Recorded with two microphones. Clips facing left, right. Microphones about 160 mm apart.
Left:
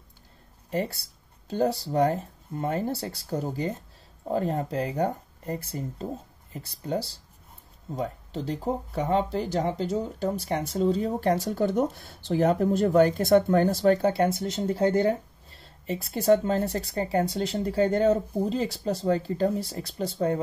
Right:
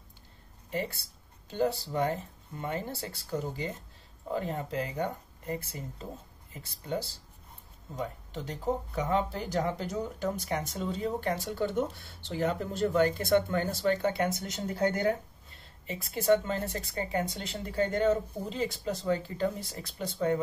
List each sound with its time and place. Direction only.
1.5 s speech: 40° left (ahead or behind)